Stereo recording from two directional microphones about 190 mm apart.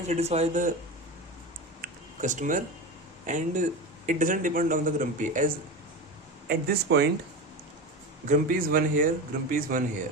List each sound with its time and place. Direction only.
0.1 s speech: 35° right (ahead or behind)
1.8 s a sound: 40° right (ahead or behind)
3.2 s speech: 40° right (ahead or behind)
6.5 s speech: 55° right (ahead or behind)
8.3 s speech: 45° right (ahead or behind)